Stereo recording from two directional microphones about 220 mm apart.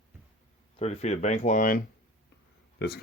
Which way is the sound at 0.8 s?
30° left (ahead or behind).